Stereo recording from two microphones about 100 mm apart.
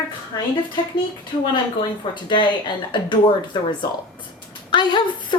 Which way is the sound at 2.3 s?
50° left (ahead or behind).